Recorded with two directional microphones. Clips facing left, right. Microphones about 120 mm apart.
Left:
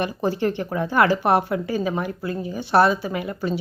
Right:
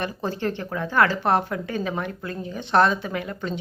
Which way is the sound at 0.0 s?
15° left (ahead or behind).